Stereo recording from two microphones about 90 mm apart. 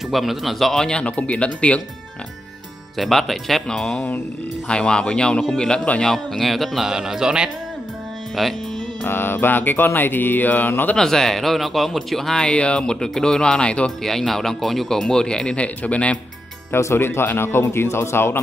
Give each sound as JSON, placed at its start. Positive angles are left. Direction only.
{"t": 0.1, "sound": "speech", "side_deg": 0}
{"t": 3.0, "sound": "speech", "side_deg": 0}
{"t": 9.0, "sound": "mantra", "side_deg": 25}
{"t": 11.0, "sound": "speech", "side_deg": 5}
{"t": 16.7, "sound": "mantra", "side_deg": 25}